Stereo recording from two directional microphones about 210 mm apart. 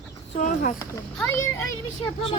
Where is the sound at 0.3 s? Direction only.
40° left (ahead or behind).